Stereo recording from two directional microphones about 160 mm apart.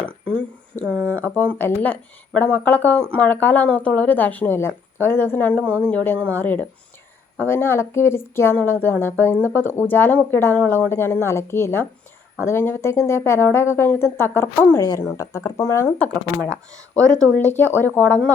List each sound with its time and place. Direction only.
0.0 s a woman's voice: 10° left (ahead or behind)
17.3 s a woman's voice: 10° left (ahead or behind)